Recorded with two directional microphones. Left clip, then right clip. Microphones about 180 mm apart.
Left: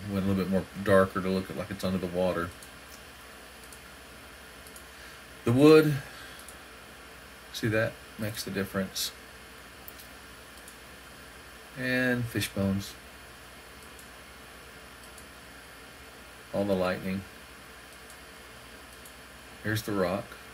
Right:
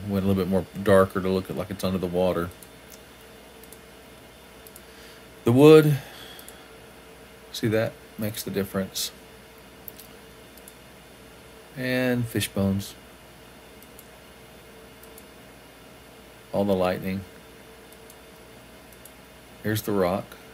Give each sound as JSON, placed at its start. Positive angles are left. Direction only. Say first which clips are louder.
{"t": 0.1, "sound": "speech", "louder": "right 5 dB", "side_deg": -25}
{"t": 5.4, "sound": "speech", "louder": "right 5 dB", "side_deg": -20}
{"t": 7.5, "sound": "speech", "louder": "right 4 dB", "side_deg": -15}
{"t": 11.8, "sound": "speech", "louder": "right 3 dB", "side_deg": -15}
{"t": 16.5, "sound": "speech", "louder": "right 5 dB", "side_deg": -20}
{"t": 19.6, "sound": "speech", "louder": "right 5 dB", "side_deg": -20}